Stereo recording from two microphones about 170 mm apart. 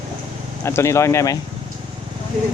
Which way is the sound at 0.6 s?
15° left (ahead or behind).